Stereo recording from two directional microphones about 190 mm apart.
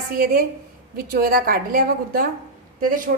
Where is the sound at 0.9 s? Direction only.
50° right (ahead or behind).